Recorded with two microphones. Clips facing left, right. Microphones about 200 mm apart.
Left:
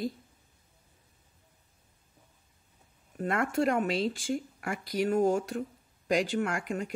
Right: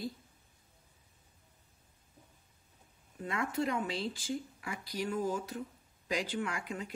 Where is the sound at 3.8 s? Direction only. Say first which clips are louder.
Left 8 dB; 85° left.